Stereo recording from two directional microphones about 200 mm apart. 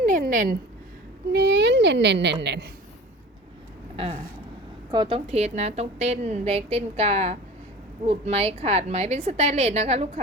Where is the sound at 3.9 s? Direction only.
30° right (ahead or behind).